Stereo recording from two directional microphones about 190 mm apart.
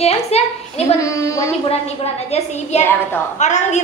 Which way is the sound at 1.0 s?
15° left (ahead or behind).